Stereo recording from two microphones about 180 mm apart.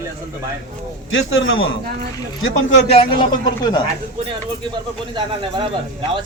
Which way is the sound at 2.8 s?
30° left (ahead or behind).